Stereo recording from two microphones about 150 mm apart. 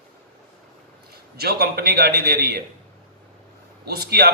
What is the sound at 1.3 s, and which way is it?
A man's voice, 90° right.